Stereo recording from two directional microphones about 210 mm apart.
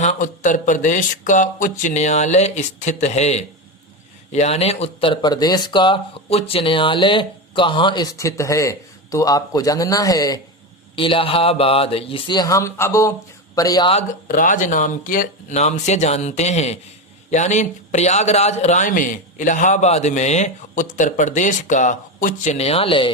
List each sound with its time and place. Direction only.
0.0 s a man's voice: 35° left (ahead or behind)
14.3 s a man's voice: 40° left (ahead or behind); by 23.1 s 25° left (ahead or behind)